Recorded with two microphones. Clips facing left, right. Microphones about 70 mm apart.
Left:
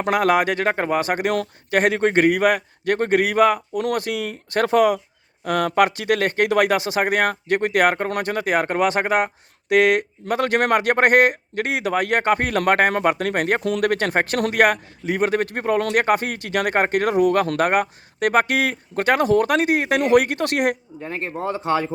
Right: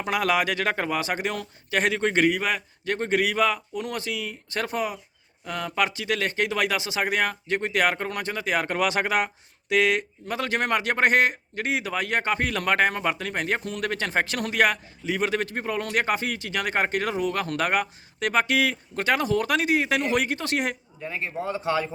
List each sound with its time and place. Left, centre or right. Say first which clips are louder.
0.0 s speech: left 6 dB; left
1.8 s speech: left 5 dB; left
21.0 s speech: left 2 dB; left